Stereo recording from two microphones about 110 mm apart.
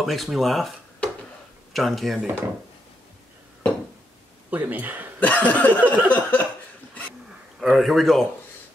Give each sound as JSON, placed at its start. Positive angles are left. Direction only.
{"t": 0.0, "sound": "speech", "side_deg": 0}
{"t": 4.5, "sound": "speech", "side_deg": -15}
{"t": 5.2, "sound": "a sound", "side_deg": 15}
{"t": 7.6, "sound": "speech", "side_deg": 0}